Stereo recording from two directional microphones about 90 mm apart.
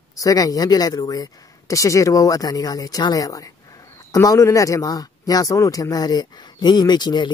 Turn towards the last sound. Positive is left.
turn(degrees=55)  # may be behind; listen again after turning